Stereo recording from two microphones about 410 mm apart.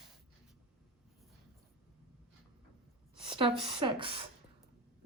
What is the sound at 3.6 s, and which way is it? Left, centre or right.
Speech, centre.